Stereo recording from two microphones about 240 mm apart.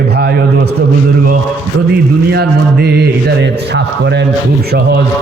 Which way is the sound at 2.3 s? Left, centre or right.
Right.